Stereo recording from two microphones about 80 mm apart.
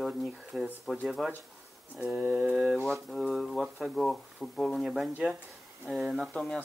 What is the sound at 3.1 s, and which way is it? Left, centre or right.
Speech, centre.